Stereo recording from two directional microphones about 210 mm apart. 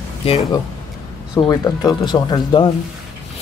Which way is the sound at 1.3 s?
20° left (ahead or behind).